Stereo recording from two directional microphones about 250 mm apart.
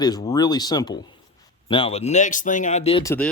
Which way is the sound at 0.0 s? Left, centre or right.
Centre.